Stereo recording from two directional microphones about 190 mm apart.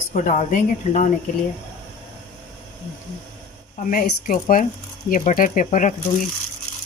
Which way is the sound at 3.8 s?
45° left (ahead or behind).